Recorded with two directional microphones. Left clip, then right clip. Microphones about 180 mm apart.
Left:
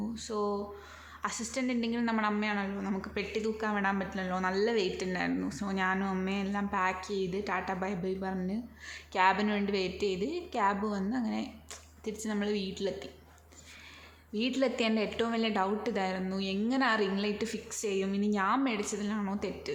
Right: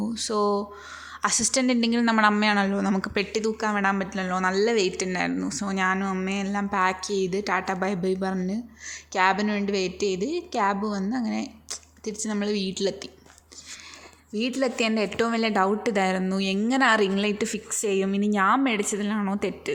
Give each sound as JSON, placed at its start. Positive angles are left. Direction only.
{"t": 0.0, "sound": "a woman's voice", "side_deg": -35}
{"t": 14.3, "sound": "a woman's voice", "side_deg": -20}